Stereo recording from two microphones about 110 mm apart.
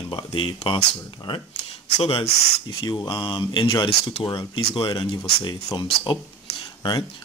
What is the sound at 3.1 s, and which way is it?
Speech, 45° left (ahead or behind).